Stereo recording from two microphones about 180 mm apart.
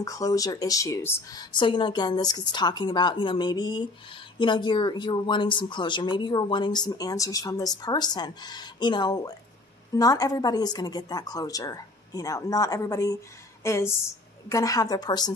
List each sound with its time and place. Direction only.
0.0 s speech: 20° left (ahead or behind)
1.6 s speech: 25° left (ahead or behind)